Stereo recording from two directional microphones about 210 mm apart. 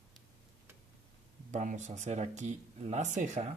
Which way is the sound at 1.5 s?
35° right (ahead or behind).